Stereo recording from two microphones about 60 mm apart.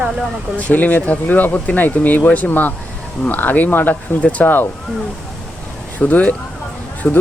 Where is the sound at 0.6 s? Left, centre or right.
Left.